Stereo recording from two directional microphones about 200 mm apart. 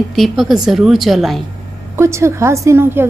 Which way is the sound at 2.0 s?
15° right (ahead or behind).